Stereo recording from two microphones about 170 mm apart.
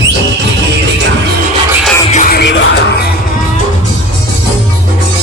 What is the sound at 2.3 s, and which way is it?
Music, 85° left.